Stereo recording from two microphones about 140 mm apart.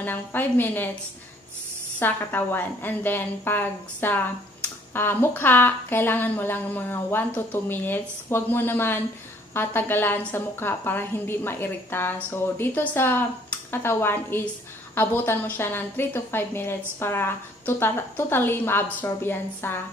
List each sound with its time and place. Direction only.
0.0 s a woman's voice: 15° left (ahead or behind)
2.0 s a woman's voice: 15° left (ahead or behind)